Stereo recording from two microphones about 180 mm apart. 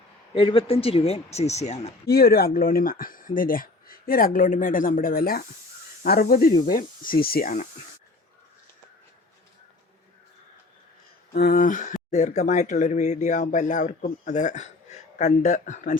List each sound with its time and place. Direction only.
0.3 s speech: 30° left (ahead or behind)
2.0 s speech: 60° left (ahead or behind)
11.3 s speech: 55° left (ahead or behind)